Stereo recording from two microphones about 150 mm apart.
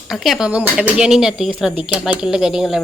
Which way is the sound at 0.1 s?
Centre (ahead or behind).